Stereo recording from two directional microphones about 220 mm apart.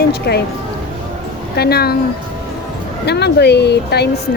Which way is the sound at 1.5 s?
45° left (ahead or behind).